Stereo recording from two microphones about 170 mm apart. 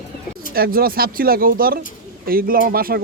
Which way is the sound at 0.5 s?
60° right (ahead or behind).